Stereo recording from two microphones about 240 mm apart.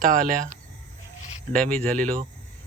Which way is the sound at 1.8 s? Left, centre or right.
Centre.